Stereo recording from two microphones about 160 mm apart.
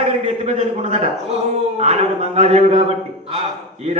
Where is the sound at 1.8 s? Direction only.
40° right (ahead or behind).